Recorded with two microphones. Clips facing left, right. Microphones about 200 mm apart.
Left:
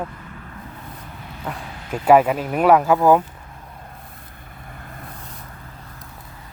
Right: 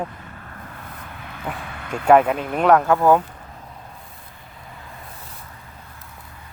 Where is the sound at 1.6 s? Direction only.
60° right (ahead or behind).